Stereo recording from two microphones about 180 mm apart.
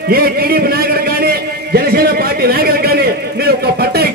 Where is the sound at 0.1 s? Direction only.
55° right (ahead or behind).